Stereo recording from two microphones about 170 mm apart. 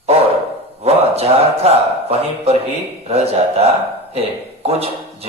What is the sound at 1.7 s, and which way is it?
Speech, 35° right (ahead or behind).